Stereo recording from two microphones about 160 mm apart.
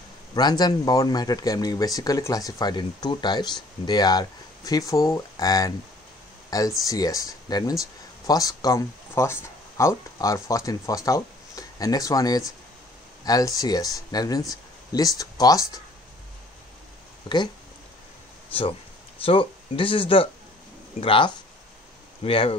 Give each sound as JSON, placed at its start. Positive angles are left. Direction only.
{"t": 0.3, "sound": "speech", "side_deg": 25}
{"t": 19.2, "sound": "speech", "side_deg": 35}